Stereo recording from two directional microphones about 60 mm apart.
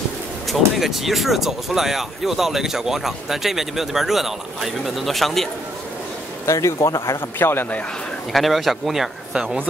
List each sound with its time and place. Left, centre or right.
0.5 s speech: centre
6.4 s a man's voice: left
7.2 s a man's voice: left
8.3 s speech: centre